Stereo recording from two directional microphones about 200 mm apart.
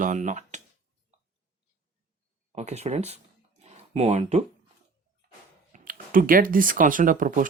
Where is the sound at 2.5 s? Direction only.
35° right (ahead or behind).